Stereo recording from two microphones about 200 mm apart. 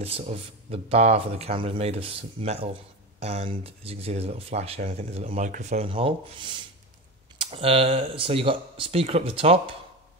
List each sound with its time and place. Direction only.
0.0 s speech: 30° right (ahead or behind)